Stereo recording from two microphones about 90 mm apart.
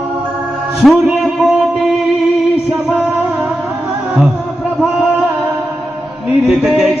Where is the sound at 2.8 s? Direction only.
10° right (ahead or behind).